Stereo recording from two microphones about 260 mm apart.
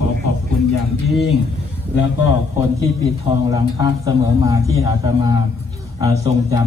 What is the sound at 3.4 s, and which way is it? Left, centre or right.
A man's voice, centre.